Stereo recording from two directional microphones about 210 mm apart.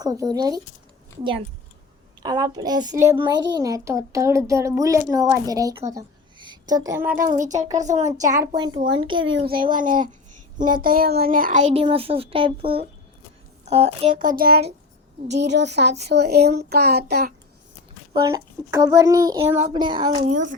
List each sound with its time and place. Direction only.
0.0 s a child's voice: 20° right (ahead or behind)
2.2 s a child's voice: 20° right (ahead or behind)
5.9 s a sound: 20° right (ahead or behind)
7.2 s speech: 40° right (ahead or behind)
8.4 s a child's voice: 20° right (ahead or behind)
9.3 s speech: 50° right (ahead or behind)
15.3 s a child's voice: 55° right (ahead or behind)
18.1 s a child's voice: 20° right (ahead or behind)